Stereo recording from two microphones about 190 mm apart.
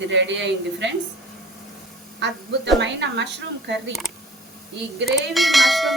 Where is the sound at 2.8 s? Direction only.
65° right (ahead or behind).